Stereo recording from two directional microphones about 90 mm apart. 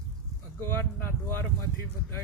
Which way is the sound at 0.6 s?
25° left (ahead or behind).